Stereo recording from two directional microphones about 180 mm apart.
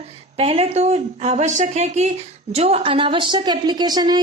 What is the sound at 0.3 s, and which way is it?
A woman's voice, 35° right (ahead or behind).